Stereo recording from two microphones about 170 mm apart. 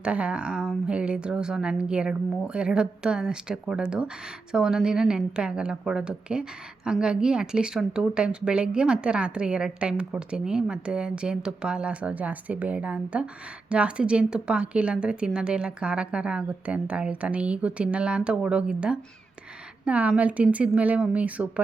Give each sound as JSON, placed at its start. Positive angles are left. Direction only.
{"t": 0.0, "sound": "a woman's voice", "side_deg": -5}